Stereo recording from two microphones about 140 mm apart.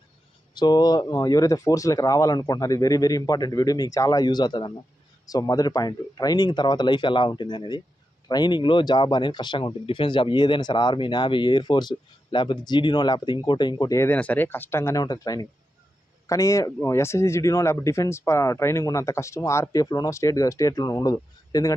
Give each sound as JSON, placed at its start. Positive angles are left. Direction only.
{"t": 0.5, "sound": "speech", "side_deg": 30}